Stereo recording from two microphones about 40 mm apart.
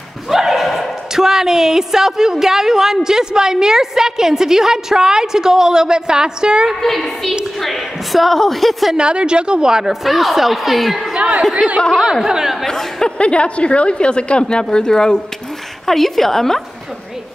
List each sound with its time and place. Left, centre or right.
0.3 s a sound: centre
1.1 s a woman's voice: centre
6.8 s a woman's voice: centre
8.9 s a woman's voice: right
10.0 s a woman's voice: centre
11.5 s speech: right
12.0 s a woman's voice: centre
12.6 s a woman's voice: centre
13.2 s a woman's voice: left
15.9 s a woman's voice: centre